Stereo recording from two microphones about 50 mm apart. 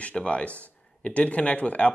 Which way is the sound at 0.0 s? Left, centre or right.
Left.